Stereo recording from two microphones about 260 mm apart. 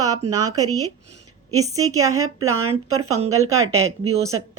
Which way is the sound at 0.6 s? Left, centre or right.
Right.